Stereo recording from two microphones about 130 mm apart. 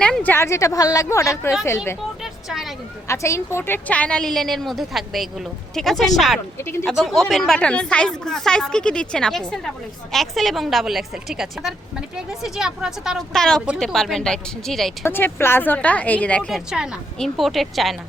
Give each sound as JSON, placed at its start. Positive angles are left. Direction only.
{"t": 0.0, "sound": "a woman's voice", "side_deg": 10}
{"t": 2.2, "sound": "a sound", "side_deg": 0}
{"t": 3.1, "sound": "a woman's voice", "side_deg": 20}
{"t": 6.6, "sound": "a woman's voice", "side_deg": 20}
{"t": 6.8, "sound": "a woman's voice", "side_deg": 0}
{"t": 15.0, "sound": "speech", "side_deg": 20}
{"t": 16.5, "sound": "a woman's voice", "side_deg": -5}